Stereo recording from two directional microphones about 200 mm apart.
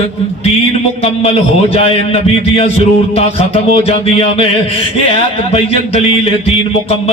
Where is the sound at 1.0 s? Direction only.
30° left (ahead or behind).